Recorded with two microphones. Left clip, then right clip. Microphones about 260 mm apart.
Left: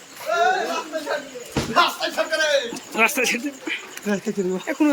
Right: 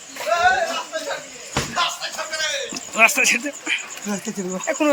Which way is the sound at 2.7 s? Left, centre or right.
Centre.